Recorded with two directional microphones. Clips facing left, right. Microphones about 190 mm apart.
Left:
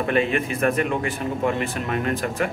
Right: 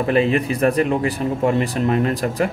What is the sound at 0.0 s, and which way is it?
Speech, 35° right (ahead or behind).